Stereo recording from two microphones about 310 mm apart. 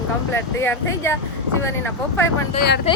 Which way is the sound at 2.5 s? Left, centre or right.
Left.